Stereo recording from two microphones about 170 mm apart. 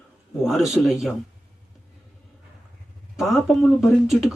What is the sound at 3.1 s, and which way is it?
Speech, centre (ahead or behind).